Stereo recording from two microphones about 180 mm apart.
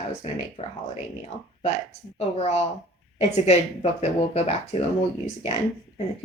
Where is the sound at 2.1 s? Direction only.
35° left (ahead or behind).